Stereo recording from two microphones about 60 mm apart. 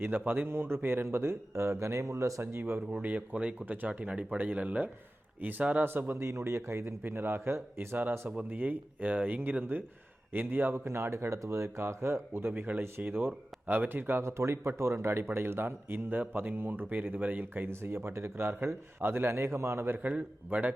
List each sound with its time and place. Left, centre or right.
0.0 s a man's voice: right
2.4 s speech: right
2.9 s a man's voice: right
8.4 s speech: right
10.8 s a man's voice: right
20.0 s speech: right